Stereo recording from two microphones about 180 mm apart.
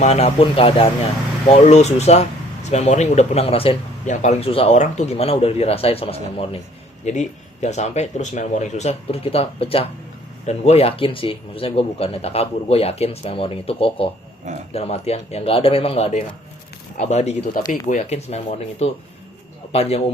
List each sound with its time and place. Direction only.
0.0 s speech: 35° left (ahead or behind)